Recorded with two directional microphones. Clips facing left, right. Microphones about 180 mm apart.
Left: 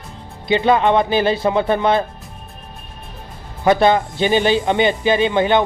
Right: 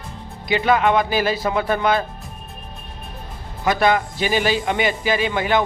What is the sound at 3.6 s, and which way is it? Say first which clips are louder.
Speech: left 4 dB; 25° left (ahead or behind).